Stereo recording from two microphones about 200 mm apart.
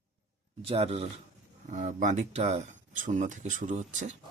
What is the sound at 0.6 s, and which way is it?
Speech, 30° right (ahead or behind).